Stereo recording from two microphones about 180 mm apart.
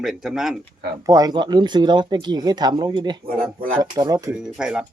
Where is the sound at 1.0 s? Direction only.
20° right (ahead or behind).